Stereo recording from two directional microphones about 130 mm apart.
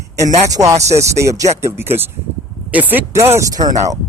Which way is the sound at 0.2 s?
25° right (ahead or behind).